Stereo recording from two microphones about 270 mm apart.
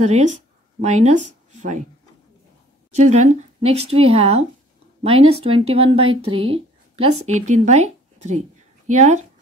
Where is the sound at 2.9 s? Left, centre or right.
Right.